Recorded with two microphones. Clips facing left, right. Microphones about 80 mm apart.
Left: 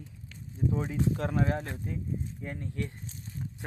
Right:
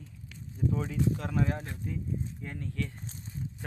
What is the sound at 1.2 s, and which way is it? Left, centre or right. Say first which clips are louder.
Speech: left 2 dB; left.